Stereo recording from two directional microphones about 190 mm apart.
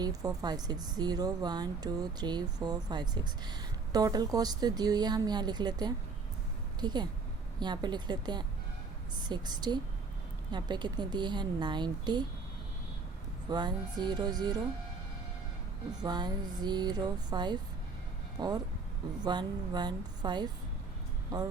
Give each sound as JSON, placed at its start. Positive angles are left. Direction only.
{"t": 0.0, "sound": "speech", "side_deg": -20}
{"t": 13.5, "sound": "speech", "side_deg": -20}
{"t": 16.0, "sound": "speech", "side_deg": -20}